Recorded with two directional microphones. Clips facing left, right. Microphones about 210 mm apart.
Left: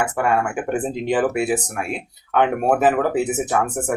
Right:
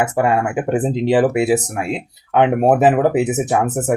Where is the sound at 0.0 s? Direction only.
20° right (ahead or behind).